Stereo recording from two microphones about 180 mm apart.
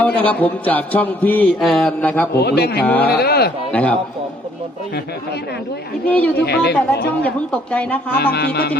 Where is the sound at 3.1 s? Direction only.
60° left (ahead or behind).